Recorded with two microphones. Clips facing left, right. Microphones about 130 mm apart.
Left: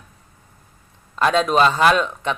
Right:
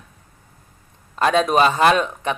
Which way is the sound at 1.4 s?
55° right (ahead or behind).